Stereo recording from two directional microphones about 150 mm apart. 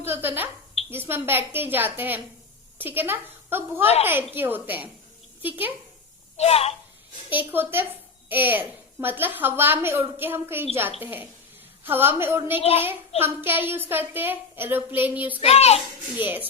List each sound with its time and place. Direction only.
0.0 s a child's voice: 15° right (ahead or behind)
6.3 s speech: 45° left (ahead or behind)
7.3 s a child's voice: 15° right (ahead or behind)
15.4 s a child's voice: 45° left (ahead or behind)
16.1 s a child's voice: 10° right (ahead or behind)